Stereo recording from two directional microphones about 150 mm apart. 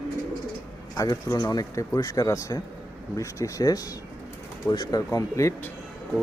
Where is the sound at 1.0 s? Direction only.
25° left (ahead or behind).